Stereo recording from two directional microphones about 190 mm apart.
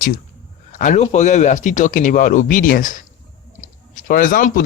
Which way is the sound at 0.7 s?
40° left (ahead or behind).